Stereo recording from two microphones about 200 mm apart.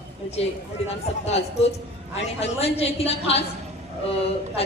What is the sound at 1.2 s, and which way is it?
A woman's voice, 30° left (ahead or behind).